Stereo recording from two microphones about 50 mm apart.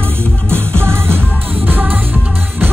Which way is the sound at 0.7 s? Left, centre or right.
Right.